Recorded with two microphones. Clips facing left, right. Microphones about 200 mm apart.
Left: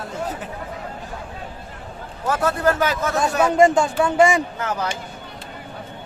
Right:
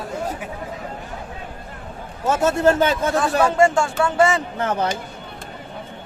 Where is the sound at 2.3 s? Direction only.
25° right (ahead or behind).